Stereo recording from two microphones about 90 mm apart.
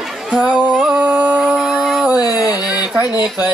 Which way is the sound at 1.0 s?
15° right (ahead or behind).